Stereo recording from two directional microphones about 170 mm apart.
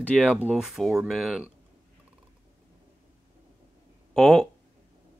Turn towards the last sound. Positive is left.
turn(degrees=5)  # may be behind; listen again after turning